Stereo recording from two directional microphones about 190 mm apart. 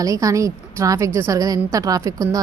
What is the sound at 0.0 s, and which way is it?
A woman's voice, 15° right (ahead or behind).